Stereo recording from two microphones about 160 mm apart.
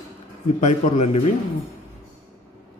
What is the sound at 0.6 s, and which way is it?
Speech, 45° left (ahead or behind).